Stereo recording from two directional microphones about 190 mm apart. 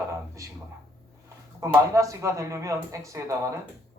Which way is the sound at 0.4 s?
15° right (ahead or behind).